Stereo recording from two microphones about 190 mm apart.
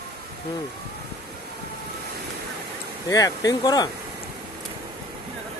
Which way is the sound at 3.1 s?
20° left (ahead or behind).